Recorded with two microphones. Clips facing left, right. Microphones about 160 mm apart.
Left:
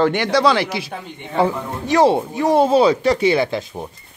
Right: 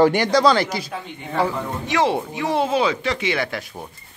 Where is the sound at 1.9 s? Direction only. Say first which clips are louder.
Left 6 dB; 35° left (ahead or behind).